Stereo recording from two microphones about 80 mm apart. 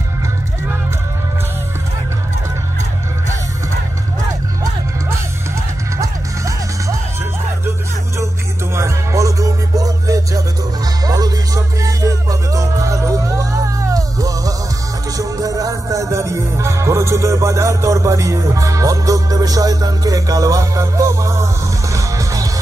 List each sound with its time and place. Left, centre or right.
5.9 s music: right
8.7 s music: right